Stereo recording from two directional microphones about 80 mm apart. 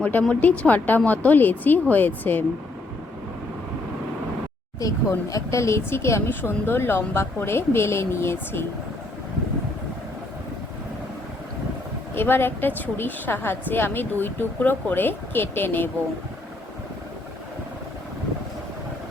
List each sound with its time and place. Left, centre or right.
0.0 s a woman's voice: centre
4.8 s speech: left
12.1 s a woman's voice: left